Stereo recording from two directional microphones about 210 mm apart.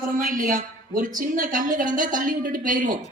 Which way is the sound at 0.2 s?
40° right (ahead or behind).